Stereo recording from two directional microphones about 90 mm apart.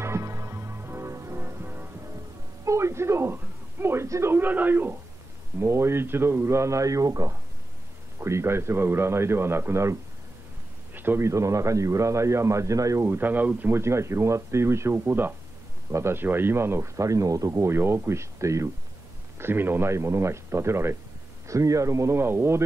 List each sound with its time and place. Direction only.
0.0 s music: 30° right (ahead or behind)
3.8 s a man's voice: 30° right (ahead or behind)
11.0 s a man's voice: 25° right (ahead or behind)